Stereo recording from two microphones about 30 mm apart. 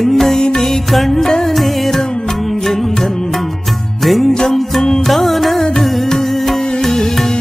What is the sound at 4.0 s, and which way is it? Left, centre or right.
Music, centre.